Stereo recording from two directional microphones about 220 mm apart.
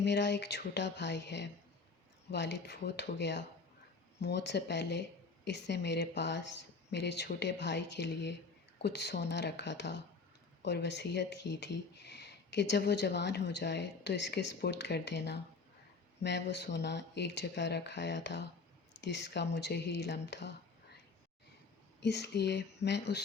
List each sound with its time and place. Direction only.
0.0 s speech: 50° left (ahead or behind)
22.0 s speech: 50° left (ahead or behind)